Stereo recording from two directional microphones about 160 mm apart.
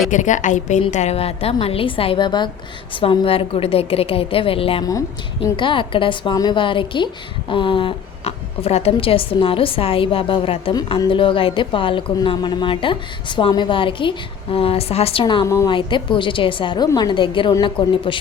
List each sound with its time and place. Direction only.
0.1 s a woman's voice: 50° left (ahead or behind); by 18.2 s 30° left (ahead or behind)